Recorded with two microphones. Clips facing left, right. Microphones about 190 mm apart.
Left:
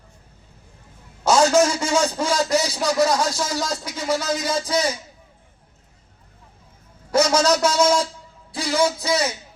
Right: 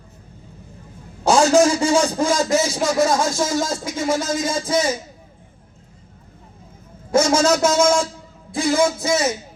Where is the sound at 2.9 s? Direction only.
50° right (ahead or behind).